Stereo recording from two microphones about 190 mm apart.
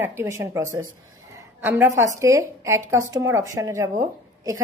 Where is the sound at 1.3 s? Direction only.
10° right (ahead or behind).